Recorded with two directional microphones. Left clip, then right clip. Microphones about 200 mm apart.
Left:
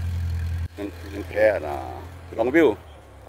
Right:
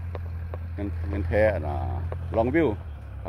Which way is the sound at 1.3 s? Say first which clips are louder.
Left 3 dB; 5° left (ahead or behind).